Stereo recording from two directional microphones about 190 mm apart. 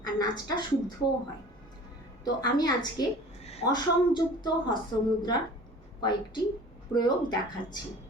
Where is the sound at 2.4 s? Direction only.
20° left (ahead or behind).